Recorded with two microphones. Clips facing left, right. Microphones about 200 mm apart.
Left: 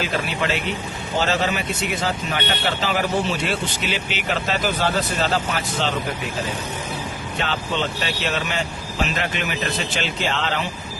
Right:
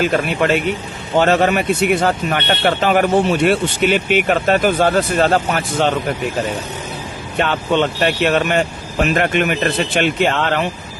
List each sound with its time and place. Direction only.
0.0 s speech: 55° right (ahead or behind)
7.3 s speech: 60° right (ahead or behind)